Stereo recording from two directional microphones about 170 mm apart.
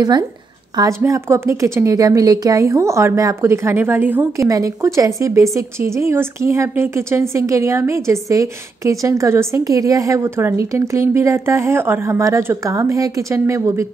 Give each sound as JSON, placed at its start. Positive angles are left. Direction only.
{"t": 0.7, "sound": "a woman's voice", "side_deg": -15}